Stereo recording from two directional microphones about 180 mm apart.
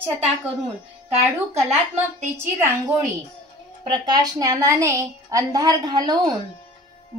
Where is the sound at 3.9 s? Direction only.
20° right (ahead or behind).